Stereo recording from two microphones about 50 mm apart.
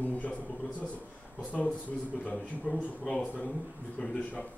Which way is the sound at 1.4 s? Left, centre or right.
Left.